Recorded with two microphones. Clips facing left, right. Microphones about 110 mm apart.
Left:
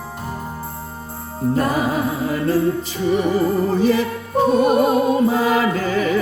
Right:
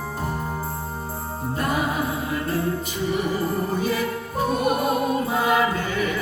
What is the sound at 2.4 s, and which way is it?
Music, 30° left (ahead or behind).